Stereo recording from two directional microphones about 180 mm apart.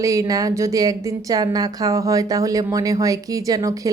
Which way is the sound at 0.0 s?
20° right (ahead or behind).